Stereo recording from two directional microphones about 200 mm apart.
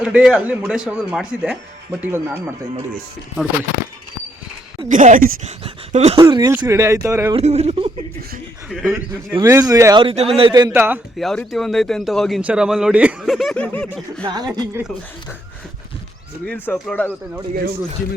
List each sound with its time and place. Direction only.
0.0 s speech: 5° right (ahead or behind)
4.9 s speech: 40° right (ahead or behind)
6.2 s speech: 15° right (ahead or behind)
7.3 s speech: 30° right (ahead or behind)
9.4 s speech: 15° right (ahead or behind)
10.0 s speech: 30° right (ahead or behind)
10.8 s speech: 10° right (ahead or behind)
11.2 s speech: centre (ahead or behind)
14.3 s speech: 20° right (ahead or behind)
16.5 s speech: 10° left (ahead or behind)
17.5 s speech: 50° right (ahead or behind)